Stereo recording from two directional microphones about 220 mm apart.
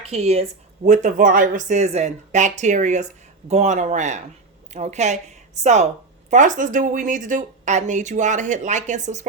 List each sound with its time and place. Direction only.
0.1 s a woman's voice: 30° right (ahead or behind)